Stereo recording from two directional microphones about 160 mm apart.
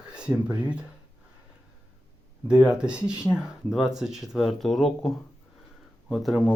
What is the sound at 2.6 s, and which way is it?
Speech, 5° right (ahead or behind).